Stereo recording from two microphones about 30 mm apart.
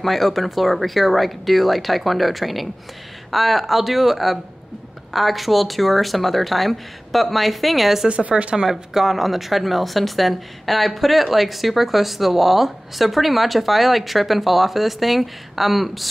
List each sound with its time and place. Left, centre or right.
0.0 s speech: centre
8.1 s speech: right
8.6 s speech: centre